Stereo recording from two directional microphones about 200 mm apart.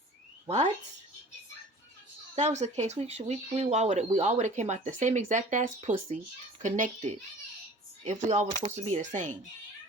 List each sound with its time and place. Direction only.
0.4 s speech: 35° right (ahead or behind)
2.3 s speech: 35° right (ahead or behind)
8.3 s speech: 35° right (ahead or behind)